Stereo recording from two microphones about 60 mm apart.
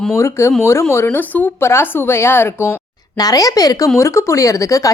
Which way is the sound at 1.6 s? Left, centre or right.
Left.